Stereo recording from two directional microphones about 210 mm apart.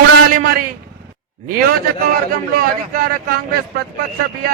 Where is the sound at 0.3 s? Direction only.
40° right (ahead or behind).